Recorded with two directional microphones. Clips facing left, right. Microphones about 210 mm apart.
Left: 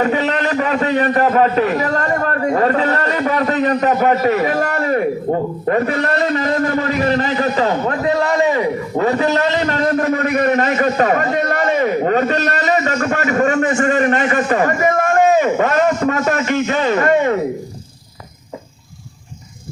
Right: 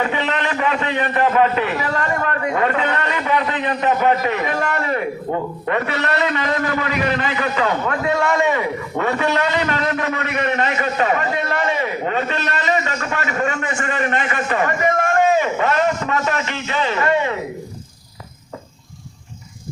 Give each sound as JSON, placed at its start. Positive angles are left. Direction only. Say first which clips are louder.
{"t": 0.0, "sound": "a man's voice", "louder": "left 5 dB", "side_deg": 40}